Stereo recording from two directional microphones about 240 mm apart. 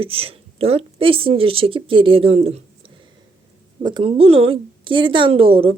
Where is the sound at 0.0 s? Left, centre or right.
Right.